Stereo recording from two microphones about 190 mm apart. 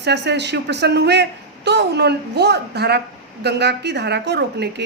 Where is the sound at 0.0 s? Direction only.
65° right (ahead or behind).